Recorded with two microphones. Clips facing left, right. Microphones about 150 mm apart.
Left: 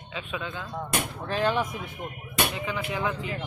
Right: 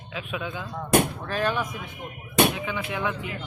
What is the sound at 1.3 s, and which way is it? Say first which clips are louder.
Speech: left 1 dB; 25° left (ahead or behind).